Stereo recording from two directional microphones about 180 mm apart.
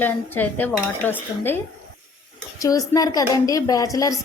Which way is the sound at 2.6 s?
20° left (ahead or behind).